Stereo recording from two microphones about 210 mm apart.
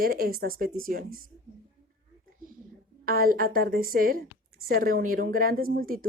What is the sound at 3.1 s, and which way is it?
Speech, 45° right (ahead or behind).